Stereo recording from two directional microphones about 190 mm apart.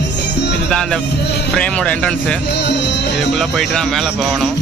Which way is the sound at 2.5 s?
65° left (ahead or behind).